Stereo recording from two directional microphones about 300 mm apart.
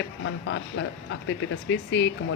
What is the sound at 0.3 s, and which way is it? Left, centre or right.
Speech, left.